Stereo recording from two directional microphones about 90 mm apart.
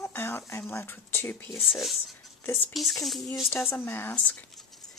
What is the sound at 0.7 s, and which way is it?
Speech, 25° left (ahead or behind).